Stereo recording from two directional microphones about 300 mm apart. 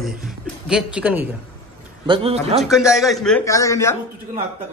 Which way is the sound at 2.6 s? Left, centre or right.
Centre.